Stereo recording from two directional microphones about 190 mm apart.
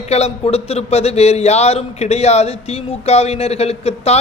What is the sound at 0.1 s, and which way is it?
Speech, 35° left (ahead or behind).